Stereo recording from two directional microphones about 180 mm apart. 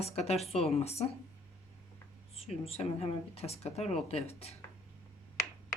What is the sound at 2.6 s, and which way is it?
Speech, 35° left (ahead or behind).